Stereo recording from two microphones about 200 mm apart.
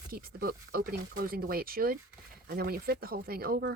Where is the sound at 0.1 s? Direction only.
45° right (ahead or behind).